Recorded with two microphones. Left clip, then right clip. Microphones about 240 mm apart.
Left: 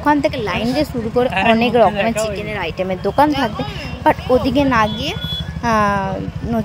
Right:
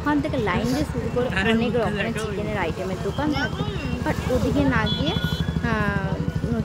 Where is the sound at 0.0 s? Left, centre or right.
Left.